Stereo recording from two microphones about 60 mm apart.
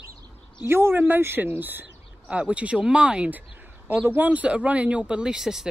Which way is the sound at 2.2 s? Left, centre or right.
Right.